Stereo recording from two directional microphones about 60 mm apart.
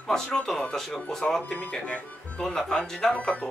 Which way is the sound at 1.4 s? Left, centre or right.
Left.